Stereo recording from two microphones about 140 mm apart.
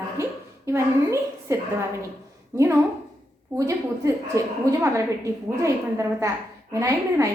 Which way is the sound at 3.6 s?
25° right (ahead or behind).